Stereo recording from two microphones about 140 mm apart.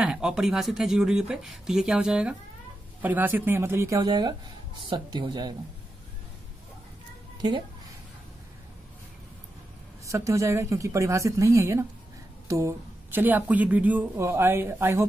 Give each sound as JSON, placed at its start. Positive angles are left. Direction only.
{"t": 0.0, "sound": "speech", "side_deg": -5}
{"t": 10.0, "sound": "a woman's voice", "side_deg": -20}